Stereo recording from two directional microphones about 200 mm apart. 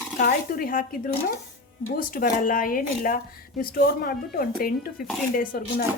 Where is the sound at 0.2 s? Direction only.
45° left (ahead or behind).